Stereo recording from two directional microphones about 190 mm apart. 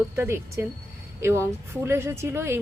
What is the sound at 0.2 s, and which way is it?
Speech, 15° right (ahead or behind).